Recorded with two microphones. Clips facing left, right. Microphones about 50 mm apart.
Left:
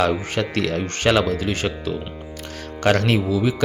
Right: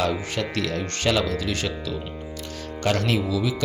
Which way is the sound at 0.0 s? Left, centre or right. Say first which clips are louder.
Left 4 dB; left.